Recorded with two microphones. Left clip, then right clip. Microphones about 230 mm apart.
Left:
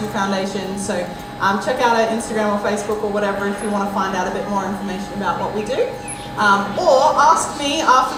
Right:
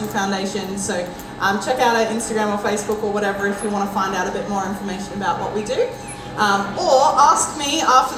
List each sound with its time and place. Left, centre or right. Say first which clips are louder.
1.4 s a woman's voice: left 1 dB; right
6.4 s a woman's voice: left 3 dB; right